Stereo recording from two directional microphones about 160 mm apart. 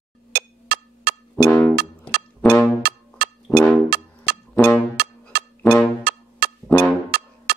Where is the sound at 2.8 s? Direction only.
75° right (ahead or behind).